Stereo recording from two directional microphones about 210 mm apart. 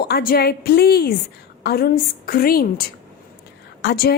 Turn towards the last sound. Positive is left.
turn(degrees=45)  # may be behind; listen again after turning